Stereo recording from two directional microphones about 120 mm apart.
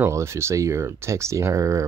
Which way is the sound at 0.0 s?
25° right (ahead or behind).